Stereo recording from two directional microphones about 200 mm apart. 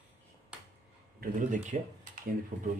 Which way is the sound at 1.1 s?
40° right (ahead or behind).